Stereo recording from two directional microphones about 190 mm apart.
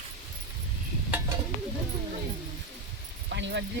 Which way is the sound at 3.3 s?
70° right (ahead or behind).